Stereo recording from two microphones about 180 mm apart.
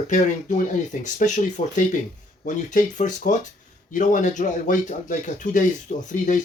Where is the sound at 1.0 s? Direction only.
45° left (ahead or behind).